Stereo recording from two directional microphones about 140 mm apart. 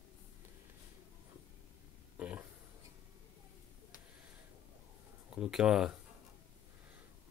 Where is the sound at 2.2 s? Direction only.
10° right (ahead or behind).